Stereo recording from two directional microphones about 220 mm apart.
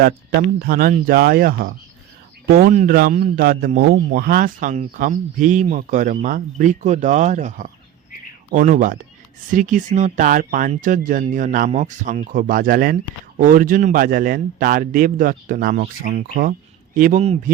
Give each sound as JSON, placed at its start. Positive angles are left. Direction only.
{"t": 0.6, "sound": "a man's voice", "side_deg": -40}